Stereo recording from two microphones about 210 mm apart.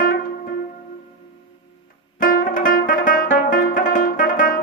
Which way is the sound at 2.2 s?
40° left (ahead or behind).